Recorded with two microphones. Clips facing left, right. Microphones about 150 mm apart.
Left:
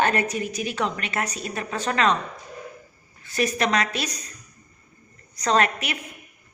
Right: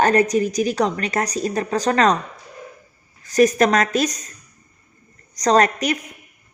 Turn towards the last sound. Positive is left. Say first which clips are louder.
# right 6 dB
turn(degrees=-40)  # may be behind; listen again after turning